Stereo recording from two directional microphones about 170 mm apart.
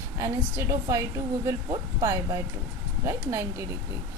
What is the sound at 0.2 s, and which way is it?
A woman's voice, 15° right (ahead or behind).